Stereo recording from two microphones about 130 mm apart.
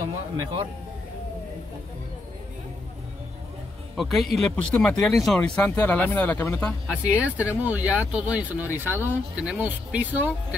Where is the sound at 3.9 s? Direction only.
Centre (ahead or behind).